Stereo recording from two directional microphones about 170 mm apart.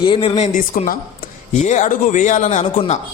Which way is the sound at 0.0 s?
30° left (ahead or behind).